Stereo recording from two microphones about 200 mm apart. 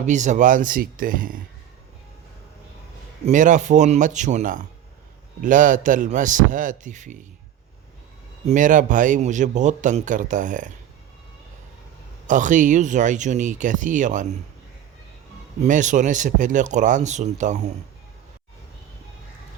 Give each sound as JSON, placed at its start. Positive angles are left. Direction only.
{"t": 0.0, "sound": "speech", "side_deg": -35}
{"t": 3.2, "sound": "a man's voice", "side_deg": -40}
{"t": 8.4, "sound": "a man's voice", "side_deg": -40}
{"t": 12.3, "sound": "a man's voice", "side_deg": -40}
{"t": 15.6, "sound": "a man's voice", "side_deg": -40}